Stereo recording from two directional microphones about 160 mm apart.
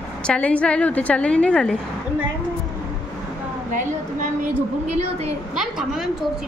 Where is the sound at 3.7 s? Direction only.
55° right (ahead or behind).